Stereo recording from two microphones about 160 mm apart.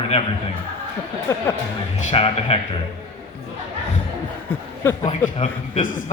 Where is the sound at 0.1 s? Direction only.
40° left (ahead or behind).